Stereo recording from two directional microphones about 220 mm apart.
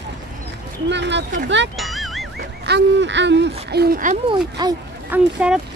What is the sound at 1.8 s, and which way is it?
Music, centre (ahead or behind).